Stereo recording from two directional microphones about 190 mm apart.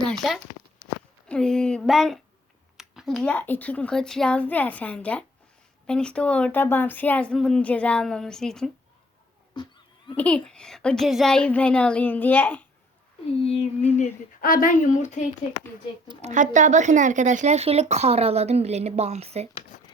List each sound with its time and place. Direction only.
0.0 s a sound: 5° left (ahead or behind)
1.3 s a woman's voice: 5° left (ahead or behind)
10.2 s a woman's voice: 5° left (ahead or behind)
13.4 s speech: 30° left (ahead or behind)
14.0 s speech: 50° left (ahead or behind)
16.0 s a woman's voice: 40° right (ahead or behind)
19.7 s a sound: 40° left (ahead or behind)